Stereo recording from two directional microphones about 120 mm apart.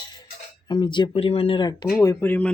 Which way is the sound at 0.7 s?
40° left (ahead or behind).